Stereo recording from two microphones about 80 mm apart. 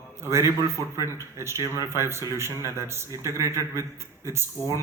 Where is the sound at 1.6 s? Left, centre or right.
Left.